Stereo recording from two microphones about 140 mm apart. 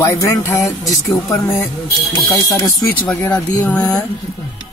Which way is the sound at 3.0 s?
10° left (ahead or behind).